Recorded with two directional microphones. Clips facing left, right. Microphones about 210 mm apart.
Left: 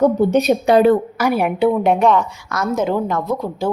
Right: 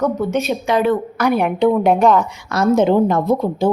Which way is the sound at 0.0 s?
30° left (ahead or behind).